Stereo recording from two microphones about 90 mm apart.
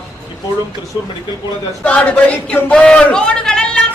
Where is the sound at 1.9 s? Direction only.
15° left (ahead or behind).